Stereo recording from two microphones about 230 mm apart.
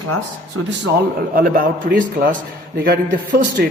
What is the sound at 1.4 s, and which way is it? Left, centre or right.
A man's voice, right.